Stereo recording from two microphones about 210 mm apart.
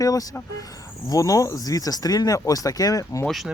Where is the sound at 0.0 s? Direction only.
15° left (ahead or behind).